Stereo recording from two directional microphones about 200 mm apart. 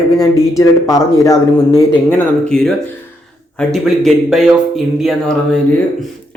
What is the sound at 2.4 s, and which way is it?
Speech, 5° left (ahead or behind).